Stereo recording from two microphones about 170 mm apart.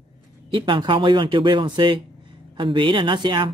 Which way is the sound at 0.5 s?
30° right (ahead or behind).